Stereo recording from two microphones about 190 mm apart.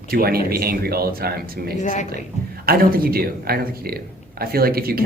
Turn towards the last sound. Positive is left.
turn(degrees=-50)  # may be behind; listen again after turning